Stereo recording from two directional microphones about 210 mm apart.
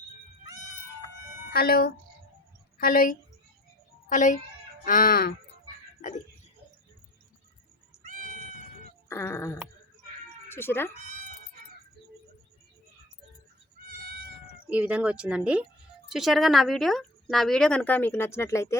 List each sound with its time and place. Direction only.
1.5 s a woman's voice: 45° left (ahead or behind)
4.9 s fowl: 40° left (ahead or behind)
8.0 s cat: 40° right (ahead or behind)
9.0 s a sound: 10° left (ahead or behind)
10.5 s speech: 10° left (ahead or behind)
14.7 s speech: 5° right (ahead or behind); by 18.8 s 15° left (ahead or behind)